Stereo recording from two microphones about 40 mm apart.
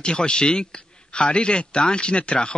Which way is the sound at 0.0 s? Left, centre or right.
Left.